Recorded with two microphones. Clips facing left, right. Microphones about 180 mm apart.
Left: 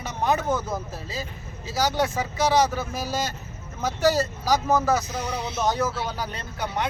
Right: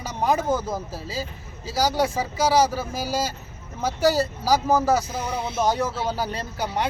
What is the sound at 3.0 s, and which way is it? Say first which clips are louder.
Speech: right 4 dB; 10° right (ahead or behind).